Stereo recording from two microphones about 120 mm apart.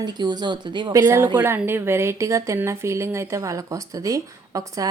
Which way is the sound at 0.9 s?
20° right (ahead or behind).